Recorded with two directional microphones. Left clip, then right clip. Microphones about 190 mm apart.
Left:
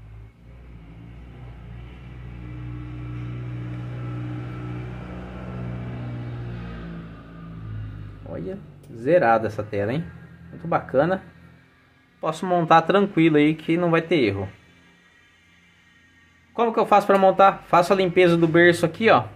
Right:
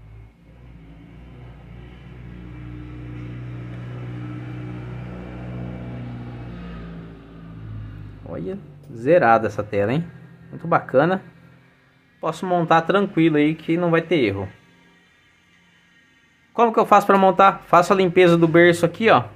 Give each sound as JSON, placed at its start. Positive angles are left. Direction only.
{"t": 8.3, "sound": "speech", "side_deg": -15}
{"t": 12.2, "sound": "speech", "side_deg": -5}
{"t": 16.5, "sound": "speech", "side_deg": -20}